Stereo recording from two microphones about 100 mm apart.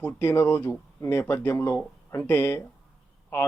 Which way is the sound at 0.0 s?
25° left (ahead or behind).